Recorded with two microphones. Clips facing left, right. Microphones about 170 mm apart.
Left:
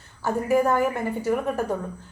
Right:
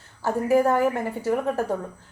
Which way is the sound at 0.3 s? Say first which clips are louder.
Right 1 dB; 30° right (ahead or behind).